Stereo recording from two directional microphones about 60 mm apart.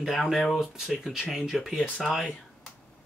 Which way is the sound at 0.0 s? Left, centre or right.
Centre.